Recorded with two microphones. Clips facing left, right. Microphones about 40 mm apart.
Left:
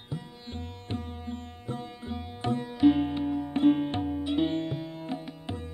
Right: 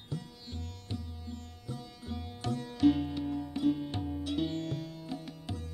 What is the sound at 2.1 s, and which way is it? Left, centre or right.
Sitar, left.